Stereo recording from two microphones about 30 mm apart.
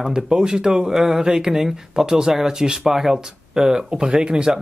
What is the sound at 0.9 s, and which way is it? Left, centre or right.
Speech, centre.